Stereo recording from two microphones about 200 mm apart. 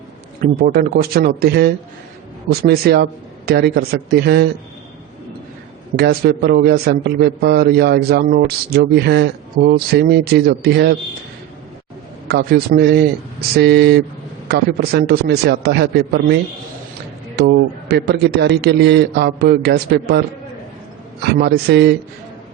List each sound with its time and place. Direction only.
0.6 s speech: 50° right (ahead or behind)
6.0 s speech: 50° right (ahead or behind)
12.3 s a man's voice: 55° right (ahead or behind)
21.3 s a man's voice: 55° right (ahead or behind)